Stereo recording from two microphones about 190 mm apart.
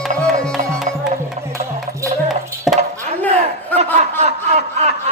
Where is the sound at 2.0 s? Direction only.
15° right (ahead or behind).